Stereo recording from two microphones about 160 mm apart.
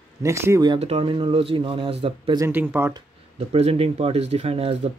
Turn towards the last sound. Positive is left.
turn(degrees=-40)  # may be behind; listen again after turning